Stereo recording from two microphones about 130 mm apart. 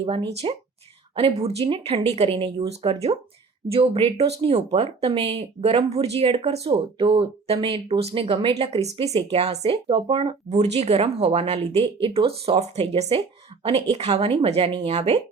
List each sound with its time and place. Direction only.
0.0 s speech: 45° right (ahead or behind)
10.5 s speech: 55° right (ahead or behind)